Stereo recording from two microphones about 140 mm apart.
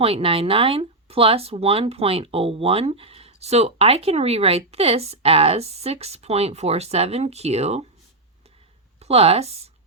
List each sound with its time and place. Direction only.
0.0 s speech: 40° right (ahead or behind)
9.0 s speech: 45° right (ahead or behind)